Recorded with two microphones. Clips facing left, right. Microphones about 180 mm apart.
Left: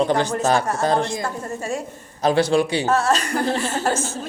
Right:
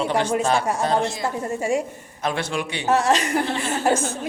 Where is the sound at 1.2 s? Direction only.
15° right (ahead or behind).